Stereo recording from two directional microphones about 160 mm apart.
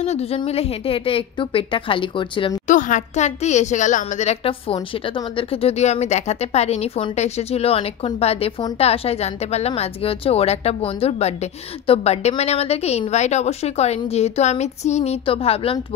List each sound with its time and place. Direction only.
0.0 s a woman's voice: 45° left (ahead or behind)
2.7 s a woman's voice: 50° left (ahead or behind)